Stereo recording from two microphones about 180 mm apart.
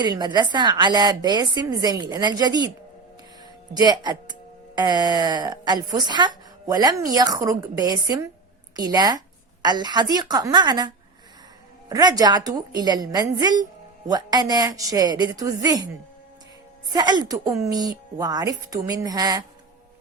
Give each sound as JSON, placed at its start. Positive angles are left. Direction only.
{"t": 0.0, "sound": "speech", "side_deg": -25}
{"t": 3.8, "sound": "a woman's voice", "side_deg": -20}
{"t": 16.9, "sound": "speech", "side_deg": -25}